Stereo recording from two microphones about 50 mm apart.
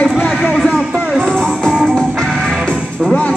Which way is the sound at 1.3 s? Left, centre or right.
Centre.